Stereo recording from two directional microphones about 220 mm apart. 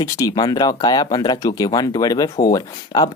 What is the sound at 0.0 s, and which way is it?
Speech, 15° left (ahead or behind).